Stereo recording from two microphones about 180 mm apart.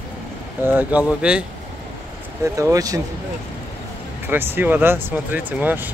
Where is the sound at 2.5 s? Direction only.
20° right (ahead or behind).